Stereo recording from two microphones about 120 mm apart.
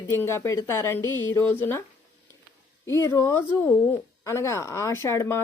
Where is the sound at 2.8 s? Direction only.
25° left (ahead or behind).